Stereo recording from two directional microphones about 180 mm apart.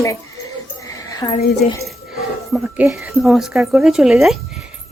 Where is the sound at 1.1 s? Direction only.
20° left (ahead or behind).